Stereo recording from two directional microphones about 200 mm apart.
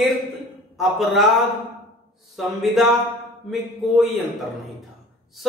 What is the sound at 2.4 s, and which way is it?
Speech, centre (ahead or behind).